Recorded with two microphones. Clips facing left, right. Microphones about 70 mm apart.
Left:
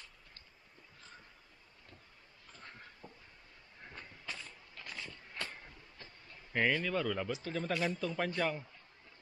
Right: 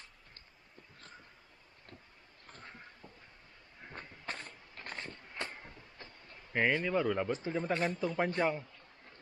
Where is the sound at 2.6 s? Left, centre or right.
Centre.